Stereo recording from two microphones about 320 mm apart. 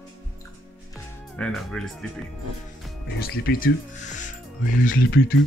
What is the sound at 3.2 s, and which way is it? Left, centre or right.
Speech, left.